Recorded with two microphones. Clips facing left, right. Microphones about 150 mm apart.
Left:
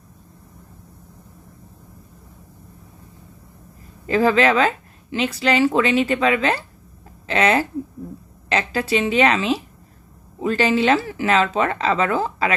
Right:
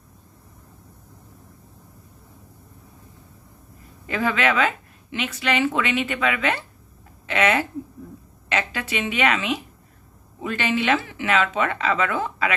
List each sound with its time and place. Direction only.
4.1 s speech: 35° left (ahead or behind)